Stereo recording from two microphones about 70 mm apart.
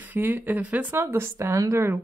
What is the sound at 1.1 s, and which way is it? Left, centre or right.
Speech, right.